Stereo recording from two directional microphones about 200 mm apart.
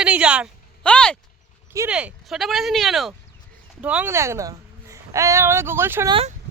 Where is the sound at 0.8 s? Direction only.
5° left (ahead or behind).